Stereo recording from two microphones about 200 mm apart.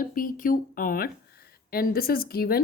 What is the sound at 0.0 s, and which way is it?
A woman's voice, 45° left (ahead or behind).